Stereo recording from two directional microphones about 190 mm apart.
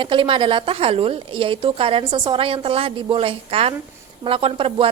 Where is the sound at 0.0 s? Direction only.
25° right (ahead or behind).